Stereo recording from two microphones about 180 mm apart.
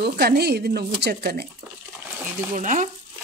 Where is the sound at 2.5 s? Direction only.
45° right (ahead or behind).